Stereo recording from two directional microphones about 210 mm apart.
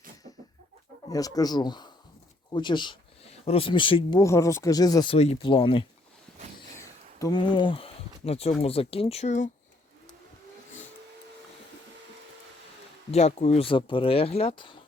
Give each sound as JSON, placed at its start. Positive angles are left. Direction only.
{"t": 1.1, "sound": "speech", "side_deg": 15}
{"t": 5.1, "sound": "speech", "side_deg": 30}
{"t": 6.6, "sound": "speech", "side_deg": 15}
{"t": 13.1, "sound": "speech", "side_deg": 30}